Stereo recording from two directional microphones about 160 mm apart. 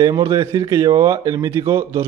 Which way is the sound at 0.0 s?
20° right (ahead or behind).